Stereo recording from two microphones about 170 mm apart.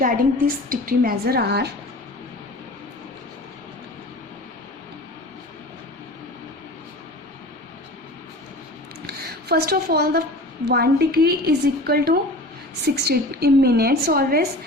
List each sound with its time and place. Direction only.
0.0 s a woman's voice: 55° right (ahead or behind); by 1.7 s 70° right (ahead or behind)
9.0 s a sound: 65° right (ahead or behind)
10.7 s a woman's voice: 65° right (ahead or behind)